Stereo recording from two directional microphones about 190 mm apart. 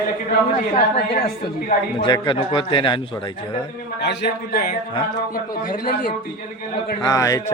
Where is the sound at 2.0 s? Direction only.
25° left (ahead or behind).